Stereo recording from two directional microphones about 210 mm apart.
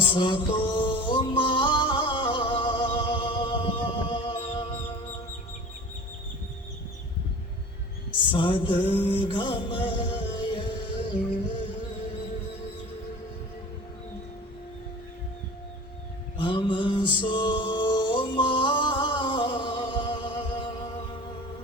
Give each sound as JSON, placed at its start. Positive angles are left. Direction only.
{"t": 0.0, "sound": "music", "side_deg": 25}
{"t": 8.3, "sound": "music", "side_deg": 20}
{"t": 16.4, "sound": "music", "side_deg": 25}